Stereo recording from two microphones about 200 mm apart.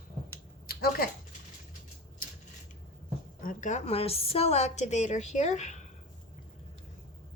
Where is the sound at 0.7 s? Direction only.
50° left (ahead or behind).